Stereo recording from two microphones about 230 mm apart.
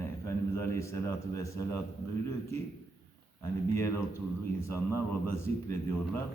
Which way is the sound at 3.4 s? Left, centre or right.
Centre.